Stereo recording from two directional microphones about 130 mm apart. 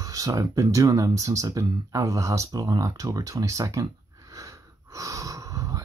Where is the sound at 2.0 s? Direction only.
25° right (ahead or behind).